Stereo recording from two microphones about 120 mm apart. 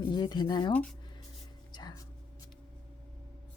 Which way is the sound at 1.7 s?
35° left (ahead or behind).